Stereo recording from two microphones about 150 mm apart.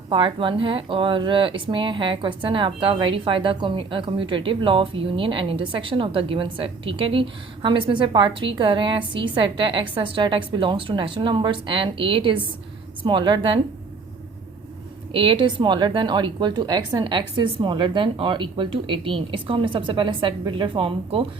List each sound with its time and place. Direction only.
0.1 s speech: 35° right (ahead or behind)
15.1 s speech: 35° right (ahead or behind)